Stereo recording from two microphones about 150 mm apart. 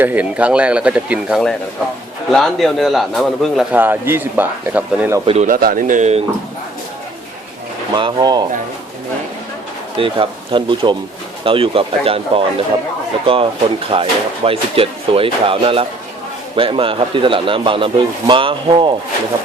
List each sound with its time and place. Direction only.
0.0 s a man's voice: 10° right (ahead or behind)
5.2 s speech: 40° right (ahead or behind)
5.5 s speech: 75° right (ahead or behind); by 6.2 s 50° right (ahead or behind)
7.9 s speech: 30° right (ahead or behind)
10.0 s speech: 35° right (ahead or behind)